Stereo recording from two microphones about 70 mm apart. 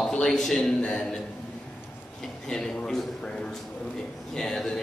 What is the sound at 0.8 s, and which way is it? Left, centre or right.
Speech, centre.